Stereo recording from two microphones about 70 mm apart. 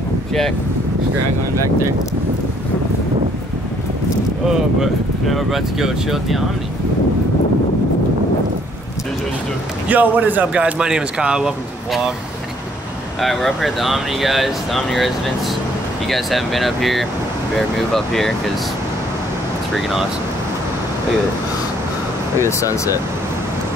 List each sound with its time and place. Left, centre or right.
4.7 s speech: centre
9.8 s speech: right; by 12.1 s centre
13.2 s speech: centre
22.4 s speech: left